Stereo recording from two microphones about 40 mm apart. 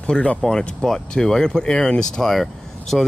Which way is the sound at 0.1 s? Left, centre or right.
Left.